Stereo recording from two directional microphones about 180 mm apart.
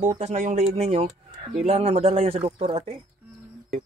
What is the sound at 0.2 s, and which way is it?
Speech, 40° right (ahead or behind).